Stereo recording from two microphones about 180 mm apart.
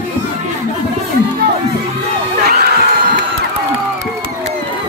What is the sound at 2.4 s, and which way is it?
Crowd, 60° right (ahead or behind).